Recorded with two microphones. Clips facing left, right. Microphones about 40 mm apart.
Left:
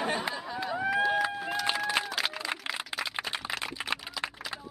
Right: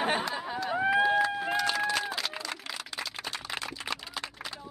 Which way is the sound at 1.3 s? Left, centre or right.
Centre.